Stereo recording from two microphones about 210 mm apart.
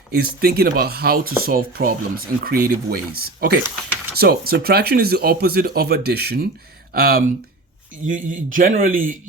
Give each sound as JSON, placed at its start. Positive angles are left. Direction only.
{"t": 0.1, "sound": "a man's voice", "side_deg": -45}